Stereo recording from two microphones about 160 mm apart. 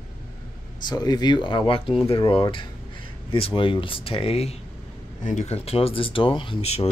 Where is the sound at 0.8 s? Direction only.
25° left (ahead or behind).